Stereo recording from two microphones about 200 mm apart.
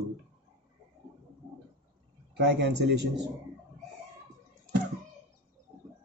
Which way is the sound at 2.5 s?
55° right (ahead or behind).